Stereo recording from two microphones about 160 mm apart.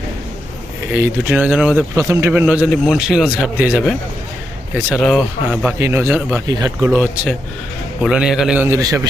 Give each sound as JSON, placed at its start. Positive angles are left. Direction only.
{"t": 0.9, "sound": "a man's voice", "side_deg": -10}
{"t": 2.0, "sound": "a man's voice", "side_deg": -20}
{"t": 4.9, "sound": "a man's voice", "side_deg": 0}
{"t": 5.5, "sound": "a man's voice", "side_deg": -15}
{"t": 6.5, "sound": "speech", "side_deg": -20}
{"t": 8.0, "sound": "a man's voice", "side_deg": -5}